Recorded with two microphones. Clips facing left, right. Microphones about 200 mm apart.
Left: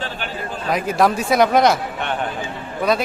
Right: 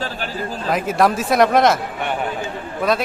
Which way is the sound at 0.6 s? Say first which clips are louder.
Even; centre (ahead or behind).